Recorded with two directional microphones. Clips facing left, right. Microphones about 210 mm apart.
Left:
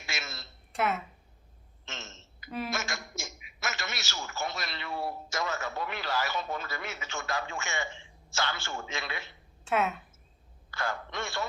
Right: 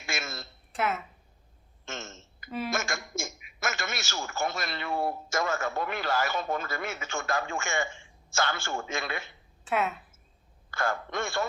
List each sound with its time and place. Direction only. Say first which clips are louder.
0.0 s a sound: right 5 dB; 50° right (ahead or behind)
0.7 s speech: even; centre (ahead or behind)
1.8 s burping: right 5 dB; 50° right (ahead or behind)
2.6 s a man's voice: right 4 dB; 50° right (ahead or behind)
9.6 s a woman's voice: even; centre (ahead or behind)
10.7 s a man's voice: right 4 dB; 50° right (ahead or behind)